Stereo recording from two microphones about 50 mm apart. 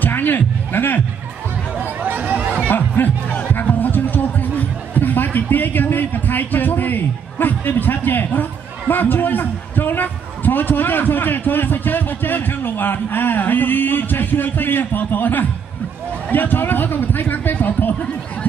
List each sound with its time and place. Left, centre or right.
0.0 s a man's voice: left
1.8 s a sound: right
2.7 s a man's voice: left